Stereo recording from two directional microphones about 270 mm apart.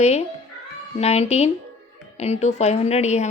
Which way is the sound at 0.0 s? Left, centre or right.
Left.